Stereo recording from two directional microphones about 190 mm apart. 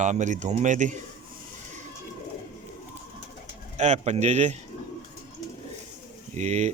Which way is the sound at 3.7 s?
35° right (ahead or behind).